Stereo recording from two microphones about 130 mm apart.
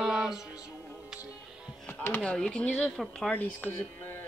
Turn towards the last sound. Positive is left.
turn(degrees=10)  # may be behind; listen again after turning